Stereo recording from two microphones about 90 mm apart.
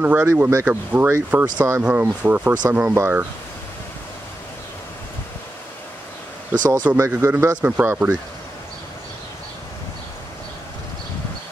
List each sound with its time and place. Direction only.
0.0 s speech: 20° right (ahead or behind)
0.3 s speech: 30° right (ahead or behind)
2.9 s speech: 30° right (ahead or behind)
6.6 s speech: 50° right (ahead or behind)
7.2 s speech: 30° right (ahead or behind)